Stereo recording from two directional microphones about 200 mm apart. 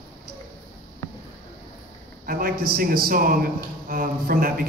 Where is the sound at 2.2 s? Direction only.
45° right (ahead or behind).